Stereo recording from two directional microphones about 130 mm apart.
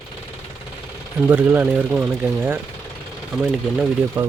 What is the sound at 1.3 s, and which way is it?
Speech, 15° right (ahead or behind).